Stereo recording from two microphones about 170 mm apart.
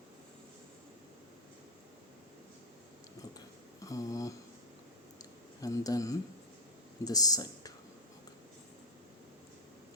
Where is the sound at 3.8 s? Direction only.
20° left (ahead or behind).